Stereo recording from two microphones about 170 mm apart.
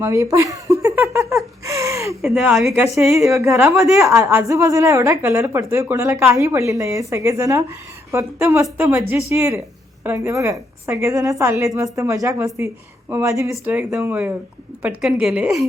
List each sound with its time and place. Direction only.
0.0 s speech: 15° right (ahead or behind)
2.2 s a woman's voice: 5° right (ahead or behind)
2.7 s a woman's voice: 15° right (ahead or behind); by 15.6 s centre (ahead or behind)